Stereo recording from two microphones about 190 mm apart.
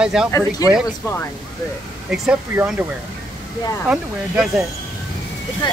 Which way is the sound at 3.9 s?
5° right (ahead or behind).